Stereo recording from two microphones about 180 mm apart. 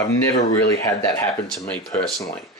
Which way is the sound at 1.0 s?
15° left (ahead or behind).